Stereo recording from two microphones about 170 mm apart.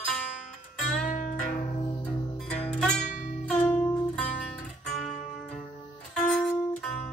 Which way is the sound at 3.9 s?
5° left (ahead or behind).